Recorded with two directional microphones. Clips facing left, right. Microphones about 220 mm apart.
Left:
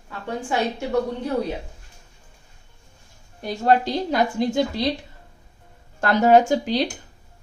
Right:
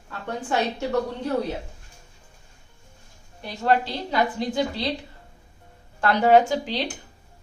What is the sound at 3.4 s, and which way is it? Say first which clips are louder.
A woman's voice: left 3 dB; 40° left (ahead or behind).